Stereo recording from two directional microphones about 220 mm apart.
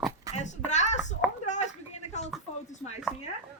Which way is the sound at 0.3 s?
30° left (ahead or behind).